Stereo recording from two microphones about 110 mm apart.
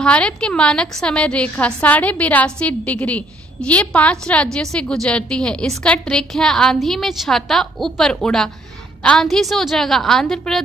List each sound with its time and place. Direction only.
0.0 s a woman's voice: 10° left (ahead or behind)